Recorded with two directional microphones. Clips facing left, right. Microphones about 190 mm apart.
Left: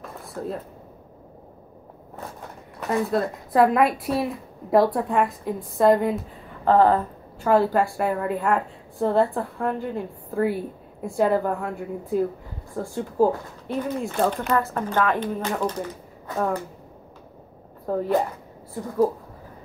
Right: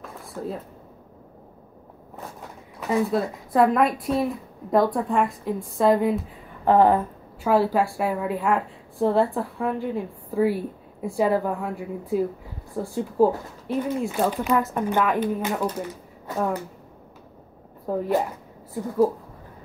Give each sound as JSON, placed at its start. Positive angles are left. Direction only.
{"t": 0.0, "sound": "a sound", "side_deg": 0}
{"t": 2.8, "sound": "a woman's voice", "side_deg": 0}
{"t": 6.6, "sound": "speech", "side_deg": -15}
{"t": 7.4, "sound": "a woman's voice", "side_deg": -5}
{"t": 14.7, "sound": "speech", "side_deg": -15}
{"t": 17.8, "sound": "a woman's voice", "side_deg": -5}